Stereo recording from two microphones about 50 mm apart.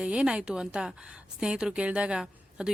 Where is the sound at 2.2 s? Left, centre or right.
Centre.